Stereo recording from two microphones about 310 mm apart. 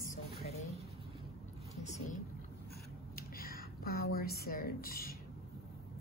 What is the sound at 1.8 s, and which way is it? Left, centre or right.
Speech, left.